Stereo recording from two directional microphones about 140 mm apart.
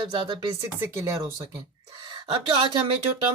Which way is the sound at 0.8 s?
20° right (ahead or behind).